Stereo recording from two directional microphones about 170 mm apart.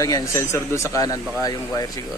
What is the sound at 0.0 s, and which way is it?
Speech, 15° left (ahead or behind).